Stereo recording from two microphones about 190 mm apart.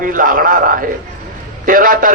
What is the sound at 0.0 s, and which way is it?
A man's voice, 45° right (ahead or behind).